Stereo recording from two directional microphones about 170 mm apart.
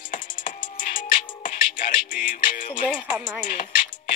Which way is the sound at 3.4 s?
50° left (ahead or behind).